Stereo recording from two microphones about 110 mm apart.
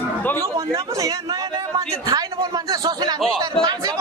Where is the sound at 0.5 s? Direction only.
30° right (ahead or behind).